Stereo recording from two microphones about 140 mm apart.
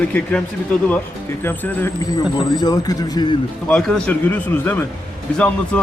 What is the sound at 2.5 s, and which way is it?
Speech, 30° left (ahead or behind).